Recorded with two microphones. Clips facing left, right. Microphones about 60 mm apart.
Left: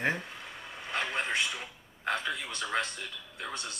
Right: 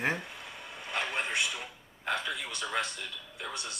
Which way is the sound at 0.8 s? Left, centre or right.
Left.